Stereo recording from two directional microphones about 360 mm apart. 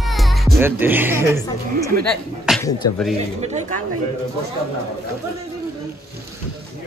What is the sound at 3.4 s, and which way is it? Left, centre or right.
Speech, centre.